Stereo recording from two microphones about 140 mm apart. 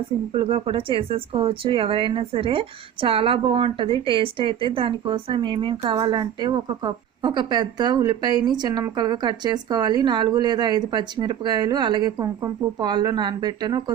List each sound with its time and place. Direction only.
0.3 s speech: 40° right (ahead or behind)